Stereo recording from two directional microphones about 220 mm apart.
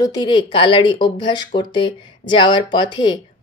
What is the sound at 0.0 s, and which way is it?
Speech, 20° left (ahead or behind).